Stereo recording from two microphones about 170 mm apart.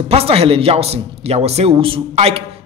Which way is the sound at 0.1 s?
35° right (ahead or behind).